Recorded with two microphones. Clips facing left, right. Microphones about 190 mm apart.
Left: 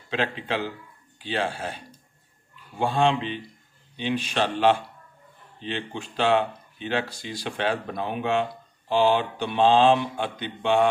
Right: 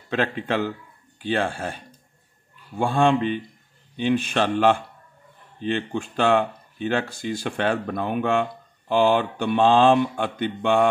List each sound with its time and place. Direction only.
0.1 s speech: 50° right (ahead or behind)
2.8 s speech: 50° right (ahead or behind)